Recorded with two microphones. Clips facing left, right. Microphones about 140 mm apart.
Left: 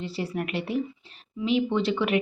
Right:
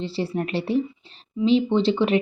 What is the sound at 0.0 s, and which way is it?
A woman's voice, 30° right (ahead or behind).